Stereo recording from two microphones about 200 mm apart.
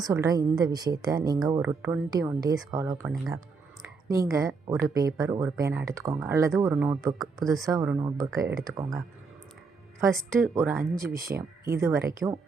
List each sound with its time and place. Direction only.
0.0 s a woman's voice: 15° right (ahead or behind)
4.1 s speech: 15° right (ahead or behind)
10.5 s speech: 10° right (ahead or behind)